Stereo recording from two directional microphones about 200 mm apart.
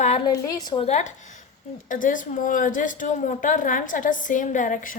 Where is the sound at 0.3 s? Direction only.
20° left (ahead or behind).